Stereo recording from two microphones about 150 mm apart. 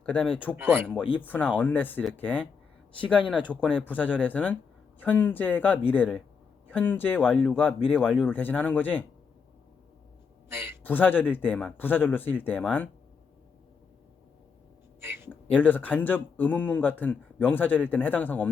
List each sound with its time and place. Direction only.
0.0 s speech: 5° left (ahead or behind)
0.5 s speech: 15° right (ahead or behind)
1.2 s speech: 10° left (ahead or behind)
3.4 s speech: 10° right (ahead or behind)
3.7 s speech: 10° left (ahead or behind)
10.5 s speech: 15° right (ahead or behind)
10.8 s speech: 10° left (ahead or behind)
15.0 s speech: 15° right (ahead or behind)
15.3 s speech: 10° left (ahead or behind)